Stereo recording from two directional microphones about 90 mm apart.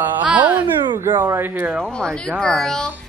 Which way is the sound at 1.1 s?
30° right (ahead or behind).